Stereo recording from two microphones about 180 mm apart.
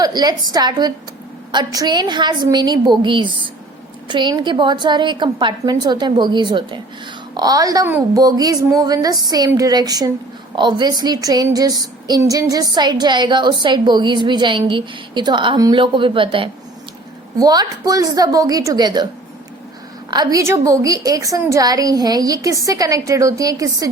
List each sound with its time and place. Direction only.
0.0 s a woman's voice: 20° right (ahead or behind)
20.1 s a woman's voice: 20° right (ahead or behind)